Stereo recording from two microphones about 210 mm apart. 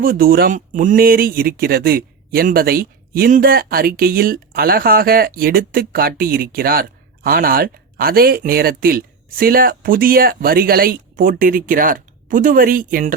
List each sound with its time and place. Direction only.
0.0 s speech: 45° right (ahead or behind)